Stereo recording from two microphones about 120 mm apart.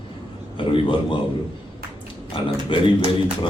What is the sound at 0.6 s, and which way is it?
Speech, 45° left (ahead or behind).